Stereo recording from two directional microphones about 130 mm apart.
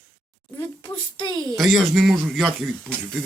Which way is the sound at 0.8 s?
40° left (ahead or behind).